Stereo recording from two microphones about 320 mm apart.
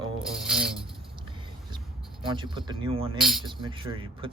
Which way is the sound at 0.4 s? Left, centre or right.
Centre.